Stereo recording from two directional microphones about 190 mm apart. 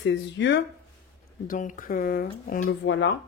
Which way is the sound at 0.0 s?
70° left (ahead or behind).